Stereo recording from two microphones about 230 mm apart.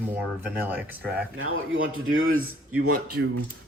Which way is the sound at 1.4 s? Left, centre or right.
Right.